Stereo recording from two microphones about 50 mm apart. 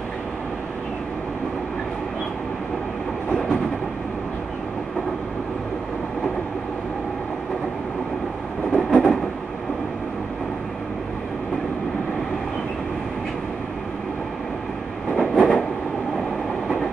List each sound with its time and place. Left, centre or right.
8.7 s train: centre
15.1 s train: centre